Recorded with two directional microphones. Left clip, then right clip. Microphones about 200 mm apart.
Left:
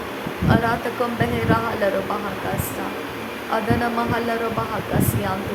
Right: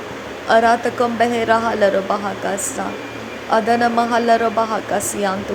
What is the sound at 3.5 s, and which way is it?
Speech, 25° right (ahead or behind).